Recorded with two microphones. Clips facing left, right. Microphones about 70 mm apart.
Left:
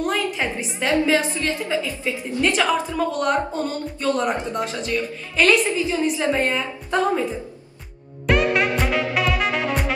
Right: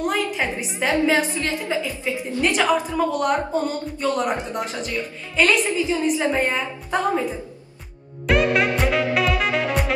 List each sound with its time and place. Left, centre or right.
0.0 s a sound: centre
0.7 s a woman's voice: centre
5.3 s a woman's voice: centre
6.2 s a woman's voice: centre
8.3 s music: centre